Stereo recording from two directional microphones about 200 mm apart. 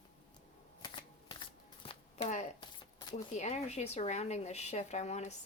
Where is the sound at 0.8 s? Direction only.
25° left (ahead or behind).